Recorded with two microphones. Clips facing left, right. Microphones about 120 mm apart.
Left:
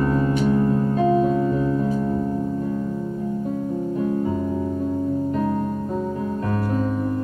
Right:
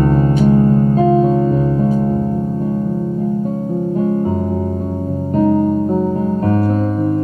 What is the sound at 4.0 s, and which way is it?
Music, 45° right (ahead or behind).